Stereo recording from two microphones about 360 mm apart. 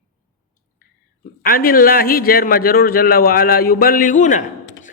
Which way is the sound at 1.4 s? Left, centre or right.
Left.